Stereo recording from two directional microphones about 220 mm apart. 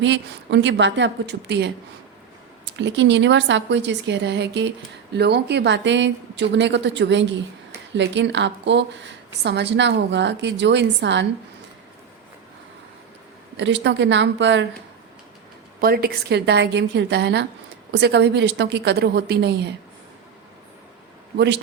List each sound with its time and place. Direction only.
0.0 s a woman's voice: 55° right (ahead or behind)
13.6 s a woman's voice: 55° right (ahead or behind)
15.8 s a woman's voice: 45° right (ahead or behind)
21.3 s a woman's voice: 50° right (ahead or behind)